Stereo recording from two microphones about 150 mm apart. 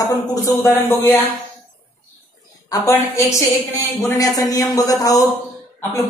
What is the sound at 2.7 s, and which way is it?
A woman's voice, 20° left (ahead or behind).